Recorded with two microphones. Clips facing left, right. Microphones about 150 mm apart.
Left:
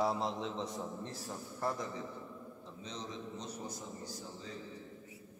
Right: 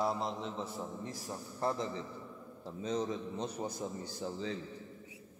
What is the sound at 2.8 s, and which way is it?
Speech, 50° right (ahead or behind).